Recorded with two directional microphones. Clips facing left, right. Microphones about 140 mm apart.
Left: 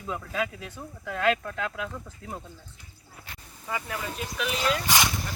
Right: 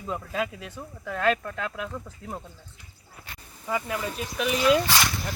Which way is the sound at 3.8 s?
Centre (ahead or behind).